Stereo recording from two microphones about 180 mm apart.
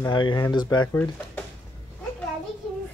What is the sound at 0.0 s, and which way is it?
Speech, 25° left (ahead or behind).